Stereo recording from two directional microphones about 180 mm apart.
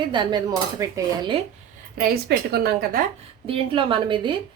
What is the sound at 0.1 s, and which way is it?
Speech, 25° right (ahead or behind).